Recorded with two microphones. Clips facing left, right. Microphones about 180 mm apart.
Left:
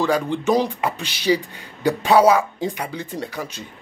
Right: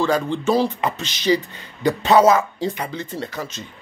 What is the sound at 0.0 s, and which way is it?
Speech, 15° left (ahead or behind).